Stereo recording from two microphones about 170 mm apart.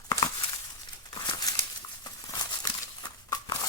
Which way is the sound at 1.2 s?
20° left (ahead or behind).